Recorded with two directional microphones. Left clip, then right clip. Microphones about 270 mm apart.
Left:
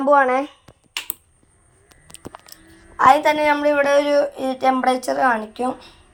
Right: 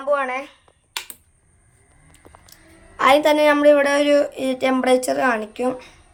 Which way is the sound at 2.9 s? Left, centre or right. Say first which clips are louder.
Left 1 dB; centre.